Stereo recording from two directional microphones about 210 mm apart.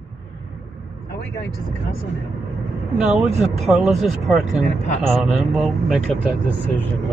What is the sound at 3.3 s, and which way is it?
Speech, 30° right (ahead or behind).